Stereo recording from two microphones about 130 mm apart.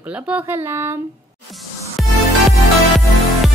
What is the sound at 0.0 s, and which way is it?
Speech, 10° right (ahead or behind).